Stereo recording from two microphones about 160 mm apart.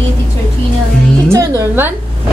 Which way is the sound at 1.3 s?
20° right (ahead or behind).